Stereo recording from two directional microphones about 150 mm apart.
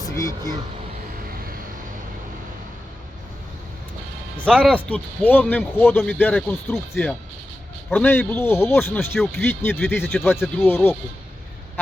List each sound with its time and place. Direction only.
0.0 s vehicle: 20° left (ahead or behind)
4.4 s speech: 5° left (ahead or behind)